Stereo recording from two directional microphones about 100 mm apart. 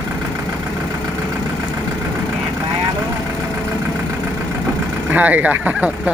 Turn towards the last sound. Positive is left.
turn(degrees=-15)  # may be behind; listen again after turning